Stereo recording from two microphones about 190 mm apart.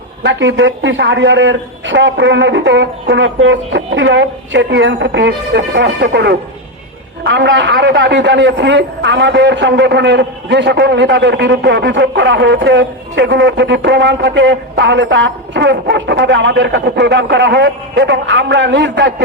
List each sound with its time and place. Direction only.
0.2 s a man's voice: 75° right (ahead or behind)